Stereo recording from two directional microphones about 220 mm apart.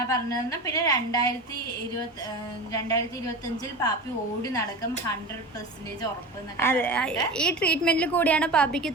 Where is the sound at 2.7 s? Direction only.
15° left (ahead or behind).